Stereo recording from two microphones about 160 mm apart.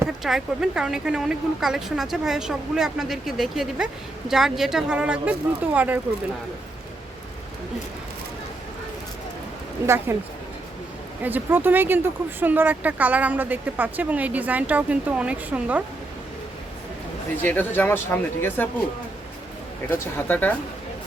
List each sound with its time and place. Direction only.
0.2 s speech: centre (ahead or behind)
9.8 s speech: 15° right (ahead or behind)
11.2 s speech: 10° right (ahead or behind)
17.4 s speech: 10° left (ahead or behind)
19.9 s speech: 10° left (ahead or behind)